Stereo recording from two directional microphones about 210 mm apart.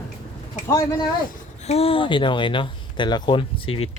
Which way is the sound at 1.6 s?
30° left (ahead or behind).